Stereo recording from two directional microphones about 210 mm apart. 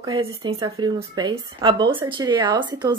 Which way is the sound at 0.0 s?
20° right (ahead or behind).